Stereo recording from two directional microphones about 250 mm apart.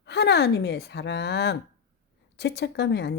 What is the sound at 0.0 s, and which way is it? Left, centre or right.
A woman's voice, left.